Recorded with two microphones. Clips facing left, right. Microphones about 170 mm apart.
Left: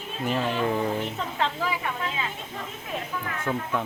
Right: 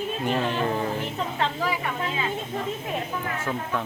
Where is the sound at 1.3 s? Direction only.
10° right (ahead or behind).